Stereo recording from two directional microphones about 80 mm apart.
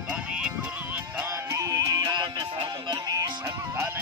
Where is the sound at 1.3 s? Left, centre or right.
Right.